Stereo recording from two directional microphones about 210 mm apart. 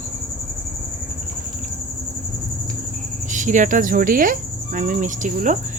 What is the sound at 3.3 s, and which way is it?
Cricket, 35° right (ahead or behind).